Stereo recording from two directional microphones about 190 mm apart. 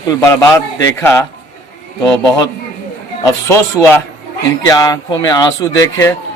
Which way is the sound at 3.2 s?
15° left (ahead or behind).